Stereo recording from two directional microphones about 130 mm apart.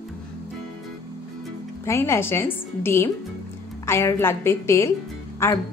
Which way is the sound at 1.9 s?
20° left (ahead or behind).